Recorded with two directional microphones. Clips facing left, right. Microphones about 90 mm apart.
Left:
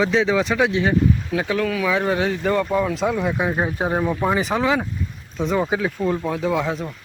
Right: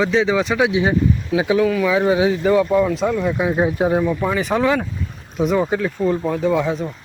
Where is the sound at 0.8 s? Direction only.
15° right (ahead or behind); by 4.0 s 5° left (ahead or behind).